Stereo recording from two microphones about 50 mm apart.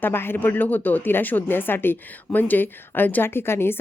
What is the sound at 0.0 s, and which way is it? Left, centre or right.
Speech, left.